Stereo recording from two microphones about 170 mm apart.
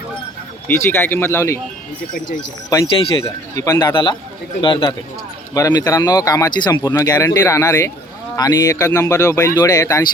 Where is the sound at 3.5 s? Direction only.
20° left (ahead or behind).